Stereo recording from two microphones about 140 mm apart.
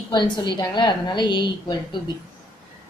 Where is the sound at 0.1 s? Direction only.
30° left (ahead or behind).